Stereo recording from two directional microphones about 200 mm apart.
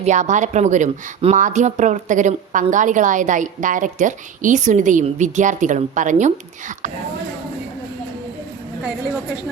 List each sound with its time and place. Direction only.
0.0 s speech: 35° right (ahead or behind)